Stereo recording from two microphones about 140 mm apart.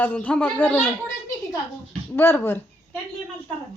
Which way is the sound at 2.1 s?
15° left (ahead or behind).